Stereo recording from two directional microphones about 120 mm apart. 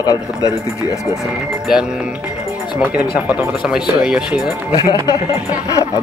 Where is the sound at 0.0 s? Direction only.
30° left (ahead or behind).